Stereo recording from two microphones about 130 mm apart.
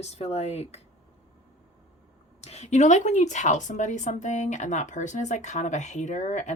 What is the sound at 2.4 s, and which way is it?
Speech, 55° left (ahead or behind).